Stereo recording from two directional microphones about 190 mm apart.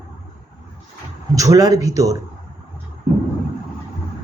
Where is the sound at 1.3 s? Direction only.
20° right (ahead or behind).